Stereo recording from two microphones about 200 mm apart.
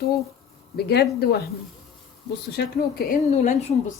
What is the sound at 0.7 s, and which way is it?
Speech, 55° left (ahead or behind).